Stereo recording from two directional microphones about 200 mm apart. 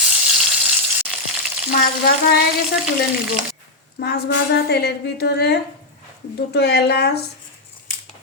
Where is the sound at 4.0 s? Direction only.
55° left (ahead or behind).